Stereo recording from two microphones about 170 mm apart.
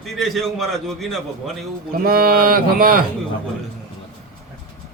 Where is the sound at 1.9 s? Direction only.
60° right (ahead or behind).